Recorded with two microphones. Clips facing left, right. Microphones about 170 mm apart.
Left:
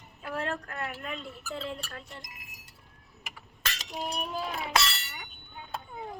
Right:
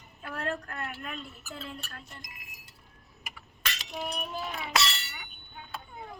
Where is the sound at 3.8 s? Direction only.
40° left (ahead or behind).